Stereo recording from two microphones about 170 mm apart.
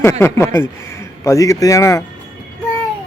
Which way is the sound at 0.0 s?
15° left (ahead or behind).